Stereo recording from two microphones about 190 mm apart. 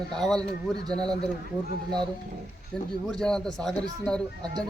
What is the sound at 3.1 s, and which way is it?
A man's voice, 5° left (ahead or behind).